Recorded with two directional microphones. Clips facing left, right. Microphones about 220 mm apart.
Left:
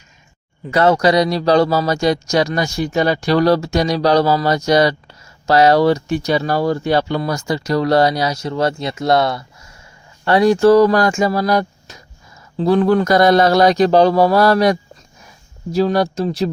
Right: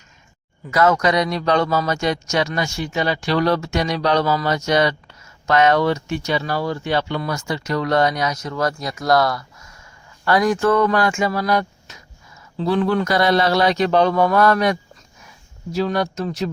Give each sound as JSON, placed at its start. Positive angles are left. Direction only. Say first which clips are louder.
{"t": 0.6, "sound": "speech", "louder": "left 4 dB", "side_deg": 30}